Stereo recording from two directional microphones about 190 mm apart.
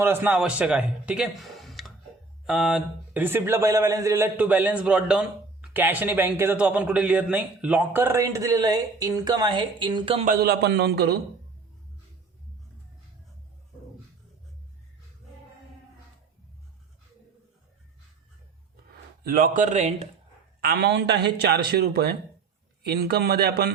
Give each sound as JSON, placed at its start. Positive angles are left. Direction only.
{"t": 0.0, "sound": "a man's voice", "side_deg": -10}
{"t": 10.2, "sound": "a man's voice", "side_deg": -50}
{"t": 19.2, "sound": "speech", "side_deg": -50}
{"t": 20.6, "sound": "a man's voice", "side_deg": -55}